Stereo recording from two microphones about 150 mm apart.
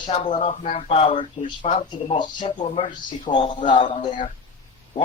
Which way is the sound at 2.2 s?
35° left (ahead or behind).